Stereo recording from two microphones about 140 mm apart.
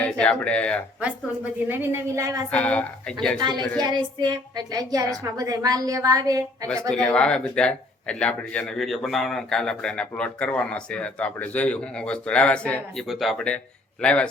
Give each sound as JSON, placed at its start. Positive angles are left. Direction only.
{"t": 0.0, "sound": "speech", "side_deg": 5}
{"t": 1.6, "sound": "a woman's voice", "side_deg": -15}
{"t": 2.5, "sound": "speech", "side_deg": 10}
{"t": 3.8, "sound": "a woman's voice", "side_deg": -30}
{"t": 6.9, "sound": "speech", "side_deg": 5}